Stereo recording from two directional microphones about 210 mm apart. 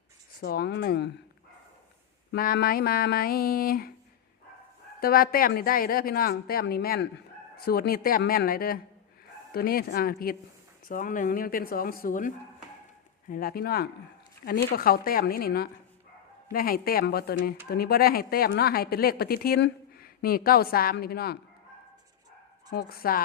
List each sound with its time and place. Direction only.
0.3 s speech: 45° left (ahead or behind)
2.3 s speech: 45° left (ahead or behind)
4.9 s speech: 45° left (ahead or behind)
13.3 s speech: 45° left (ahead or behind)
22.7 s speech: 45° left (ahead or behind)